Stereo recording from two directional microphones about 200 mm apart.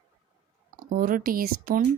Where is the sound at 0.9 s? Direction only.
45° right (ahead or behind).